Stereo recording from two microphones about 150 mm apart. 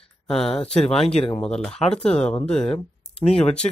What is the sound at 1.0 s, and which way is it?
Speech, 40° left (ahead or behind).